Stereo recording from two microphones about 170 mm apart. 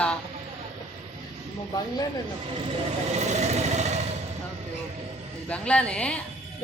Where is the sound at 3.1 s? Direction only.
40° right (ahead or behind).